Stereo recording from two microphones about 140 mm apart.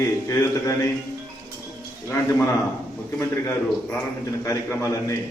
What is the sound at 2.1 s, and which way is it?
A man's voice, 20° left (ahead or behind).